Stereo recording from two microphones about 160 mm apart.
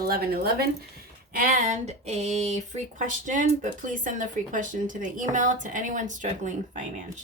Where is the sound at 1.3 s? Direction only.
60° right (ahead or behind).